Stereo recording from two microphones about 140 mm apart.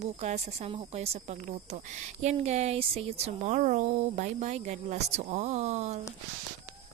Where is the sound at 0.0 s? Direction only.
55° right (ahead or behind).